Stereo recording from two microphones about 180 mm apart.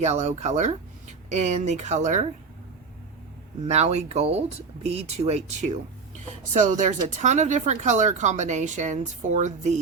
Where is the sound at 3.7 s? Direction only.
35° right (ahead or behind).